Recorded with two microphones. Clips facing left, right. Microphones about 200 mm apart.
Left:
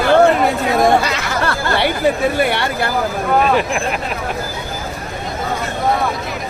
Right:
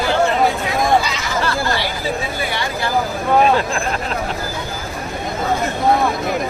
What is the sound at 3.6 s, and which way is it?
Speech, 15° left (ahead or behind).